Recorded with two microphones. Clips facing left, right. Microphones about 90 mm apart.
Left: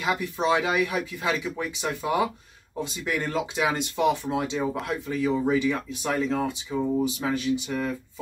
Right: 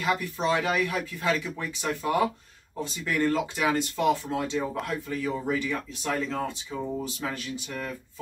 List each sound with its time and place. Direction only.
0.0 s speech: 15° left (ahead or behind)